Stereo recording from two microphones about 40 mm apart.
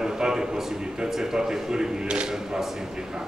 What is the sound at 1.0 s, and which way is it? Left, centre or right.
A man's voice, centre.